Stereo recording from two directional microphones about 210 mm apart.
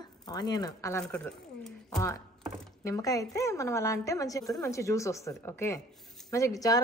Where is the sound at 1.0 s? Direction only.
5° left (ahead or behind).